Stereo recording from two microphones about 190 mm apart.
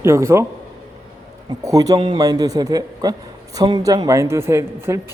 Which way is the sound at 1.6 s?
20° right (ahead or behind).